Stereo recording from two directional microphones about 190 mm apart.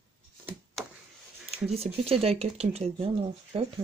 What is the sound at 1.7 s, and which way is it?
Speech, 30° right (ahead or behind).